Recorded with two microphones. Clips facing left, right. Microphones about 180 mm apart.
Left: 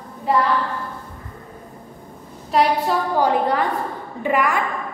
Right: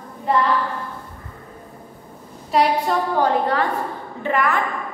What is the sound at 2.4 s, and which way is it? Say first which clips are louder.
Speech: even; centre (ahead or behind).